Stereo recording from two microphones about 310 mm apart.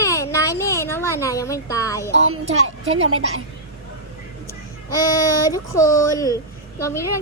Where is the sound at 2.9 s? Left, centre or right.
Right.